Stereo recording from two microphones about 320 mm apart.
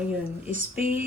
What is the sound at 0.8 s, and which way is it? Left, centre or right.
Speech, right.